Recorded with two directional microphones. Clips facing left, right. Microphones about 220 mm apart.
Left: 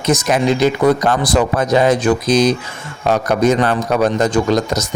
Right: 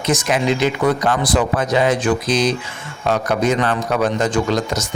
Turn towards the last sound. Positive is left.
turn(degrees=40)  # may be behind; listen again after turning